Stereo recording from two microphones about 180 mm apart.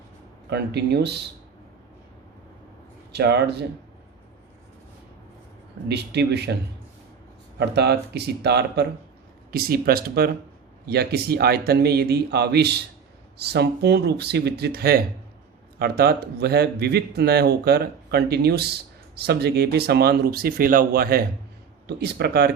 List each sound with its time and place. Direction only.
0.5 s speech: 65° right (ahead or behind)
3.1 s speech: 70° right (ahead or behind)
5.9 s speech: 65° right (ahead or behind)
7.6 s speech: 65° right (ahead or behind)
9.5 s speech: 55° right (ahead or behind)